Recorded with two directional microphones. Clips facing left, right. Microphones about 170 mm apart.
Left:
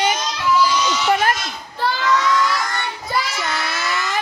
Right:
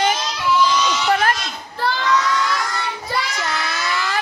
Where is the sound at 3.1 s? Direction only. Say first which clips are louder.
Left 2 dB; centre (ahead or behind).